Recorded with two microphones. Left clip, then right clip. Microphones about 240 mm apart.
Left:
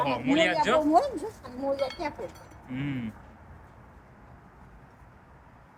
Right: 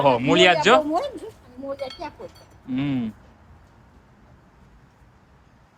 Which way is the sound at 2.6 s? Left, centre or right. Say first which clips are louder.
Right 9 dB; centre.